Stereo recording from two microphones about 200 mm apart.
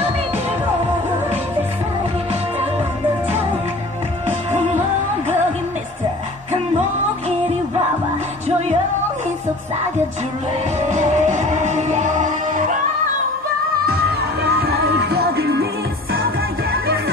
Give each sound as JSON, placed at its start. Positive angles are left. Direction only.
{"t": 4.3, "sound": "music", "side_deg": -35}
{"t": 10.8, "sound": "music", "side_deg": -35}
{"t": 14.4, "sound": "music", "side_deg": -50}